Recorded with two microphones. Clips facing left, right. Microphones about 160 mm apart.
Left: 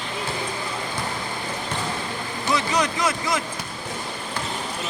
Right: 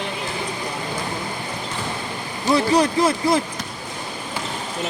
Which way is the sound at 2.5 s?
30° right (ahead or behind).